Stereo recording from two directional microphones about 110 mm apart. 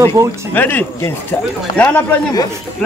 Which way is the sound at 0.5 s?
20° left (ahead or behind).